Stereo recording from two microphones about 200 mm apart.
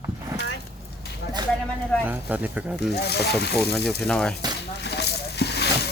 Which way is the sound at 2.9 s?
55° left (ahead or behind).